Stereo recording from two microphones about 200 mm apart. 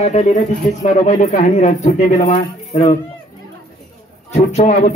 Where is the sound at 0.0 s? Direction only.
35° left (ahead or behind).